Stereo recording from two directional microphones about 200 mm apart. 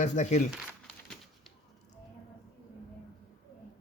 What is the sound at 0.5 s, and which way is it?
Crumpling, centre (ahead or behind).